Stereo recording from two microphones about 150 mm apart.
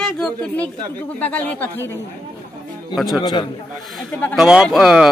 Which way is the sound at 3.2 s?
30° left (ahead or behind).